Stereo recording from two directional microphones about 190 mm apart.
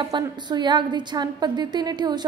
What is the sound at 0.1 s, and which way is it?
A woman's voice, 25° right (ahead or behind).